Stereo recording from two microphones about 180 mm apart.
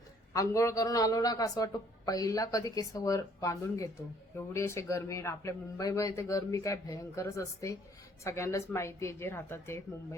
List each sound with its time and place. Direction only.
0.3 s a man's voice: 15° left (ahead or behind)